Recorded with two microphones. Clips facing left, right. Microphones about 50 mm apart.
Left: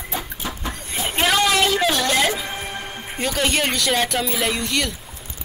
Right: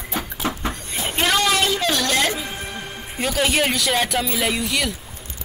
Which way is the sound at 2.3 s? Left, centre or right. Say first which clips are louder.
Left 1 dB; left.